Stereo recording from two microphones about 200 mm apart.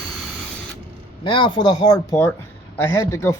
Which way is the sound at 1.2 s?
25° left (ahead or behind).